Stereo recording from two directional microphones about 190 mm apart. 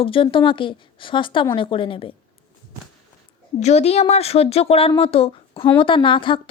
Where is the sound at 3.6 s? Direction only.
35° left (ahead or behind).